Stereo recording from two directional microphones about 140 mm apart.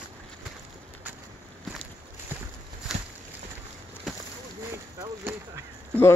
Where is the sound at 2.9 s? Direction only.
Centre (ahead or behind).